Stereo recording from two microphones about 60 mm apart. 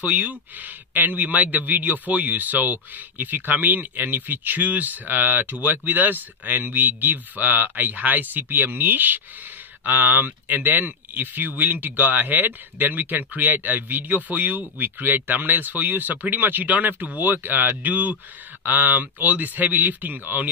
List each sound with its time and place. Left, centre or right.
0.0 s a man's voice: right